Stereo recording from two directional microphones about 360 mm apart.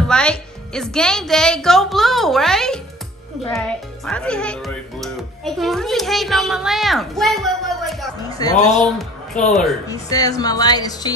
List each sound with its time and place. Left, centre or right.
0.1 s speech: centre
8.4 s speech: centre
8.8 s a woman's voice: centre